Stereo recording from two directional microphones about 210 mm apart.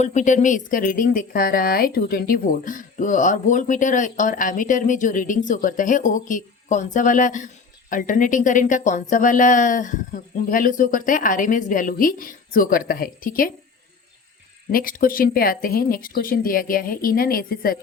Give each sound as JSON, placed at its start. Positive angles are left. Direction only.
{"t": 0.0, "sound": "speech", "side_deg": 35}
{"t": 14.7, "sound": "speech", "side_deg": 45}